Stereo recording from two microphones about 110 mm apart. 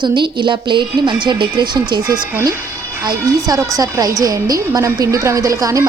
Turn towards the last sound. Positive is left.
turn(degrees=-30)  # may be behind; listen again after turning